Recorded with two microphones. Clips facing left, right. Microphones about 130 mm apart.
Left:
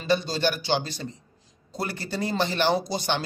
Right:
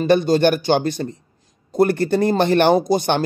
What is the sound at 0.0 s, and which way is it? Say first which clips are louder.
Speech: right 10 dB; 55° right (ahead or behind).